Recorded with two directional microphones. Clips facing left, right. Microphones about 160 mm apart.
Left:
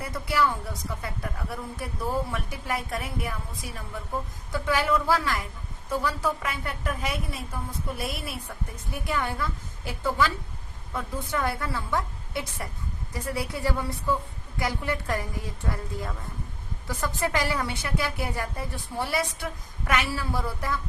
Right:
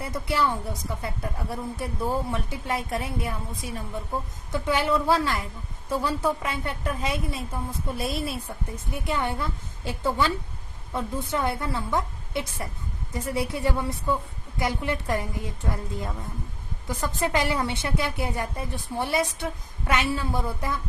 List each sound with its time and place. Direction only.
0.0 s speech: 25° right (ahead or behind)